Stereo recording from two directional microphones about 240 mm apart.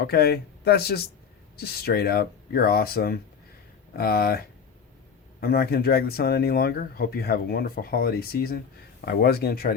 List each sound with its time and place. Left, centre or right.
0.0 s speech: left